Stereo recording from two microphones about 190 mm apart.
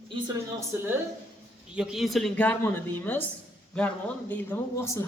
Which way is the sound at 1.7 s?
5° right (ahead or behind).